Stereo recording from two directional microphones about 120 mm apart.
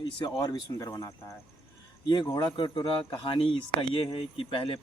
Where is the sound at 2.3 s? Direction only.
40° left (ahead or behind).